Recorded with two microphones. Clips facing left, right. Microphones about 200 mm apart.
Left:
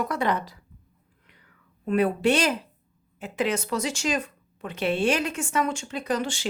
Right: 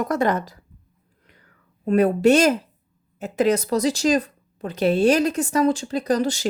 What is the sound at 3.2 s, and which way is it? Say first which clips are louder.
Speech: right 7 dB; 40° right (ahead or behind).